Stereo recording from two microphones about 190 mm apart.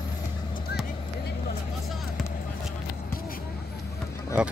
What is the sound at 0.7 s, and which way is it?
Vehicle, 55° left (ahead or behind).